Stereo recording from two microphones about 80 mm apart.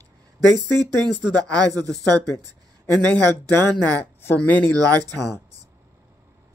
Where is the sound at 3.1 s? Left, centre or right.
Left.